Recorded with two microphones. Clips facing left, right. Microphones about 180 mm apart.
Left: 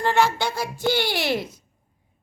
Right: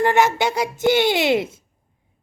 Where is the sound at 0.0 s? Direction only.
15° right (ahead or behind).